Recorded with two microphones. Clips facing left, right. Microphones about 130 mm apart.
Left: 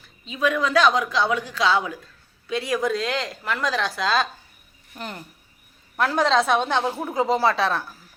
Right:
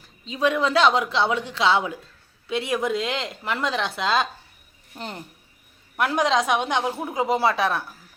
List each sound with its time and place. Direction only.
0.0 s speech: 30° right (ahead or behind)
6.0 s a woman's voice: 15° right (ahead or behind)